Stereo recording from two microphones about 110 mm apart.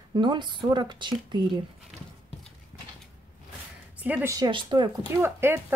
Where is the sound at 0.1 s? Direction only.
45° right (ahead or behind).